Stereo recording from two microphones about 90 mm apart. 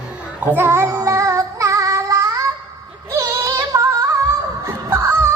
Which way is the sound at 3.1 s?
35° right (ahead or behind).